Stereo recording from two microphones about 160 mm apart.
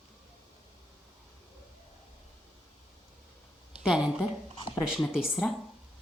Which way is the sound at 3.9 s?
30° left (ahead or behind).